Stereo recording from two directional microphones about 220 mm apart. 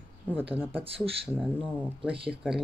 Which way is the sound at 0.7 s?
25° right (ahead or behind).